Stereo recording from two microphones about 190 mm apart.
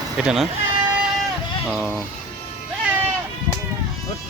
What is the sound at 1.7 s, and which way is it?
Speech, centre (ahead or behind).